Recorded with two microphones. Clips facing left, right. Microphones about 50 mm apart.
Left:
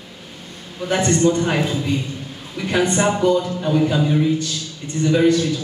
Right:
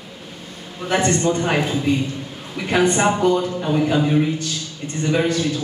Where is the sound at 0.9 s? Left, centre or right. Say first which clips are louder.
Left 1 dB; right.